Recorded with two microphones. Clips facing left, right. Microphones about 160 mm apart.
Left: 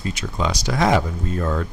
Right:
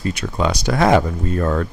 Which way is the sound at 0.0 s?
55° right (ahead or behind).